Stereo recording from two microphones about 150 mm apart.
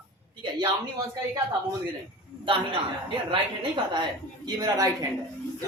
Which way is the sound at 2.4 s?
35° right (ahead or behind).